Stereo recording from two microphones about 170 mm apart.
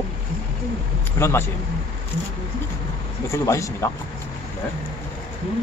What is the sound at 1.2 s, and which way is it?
Speech, 20° left (ahead or behind).